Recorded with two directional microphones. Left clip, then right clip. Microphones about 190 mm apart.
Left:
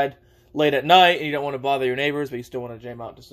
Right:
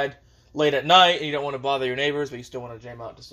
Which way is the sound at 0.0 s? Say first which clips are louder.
Left 4 dB; 30° left (ahead or behind).